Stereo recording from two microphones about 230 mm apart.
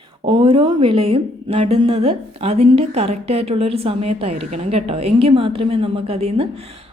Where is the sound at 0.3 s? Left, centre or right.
Right.